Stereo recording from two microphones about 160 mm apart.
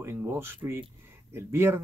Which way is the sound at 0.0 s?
15° right (ahead or behind).